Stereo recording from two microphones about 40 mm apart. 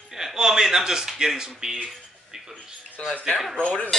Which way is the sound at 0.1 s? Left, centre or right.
Centre.